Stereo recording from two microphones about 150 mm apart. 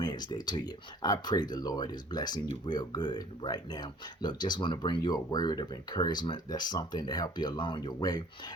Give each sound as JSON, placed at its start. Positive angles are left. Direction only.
{"t": 0.0, "sound": "speech", "side_deg": 30}